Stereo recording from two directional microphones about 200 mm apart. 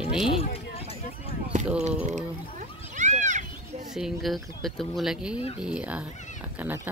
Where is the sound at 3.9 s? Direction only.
Centre (ahead or behind).